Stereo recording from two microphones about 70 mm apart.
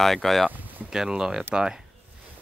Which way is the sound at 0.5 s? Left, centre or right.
Right.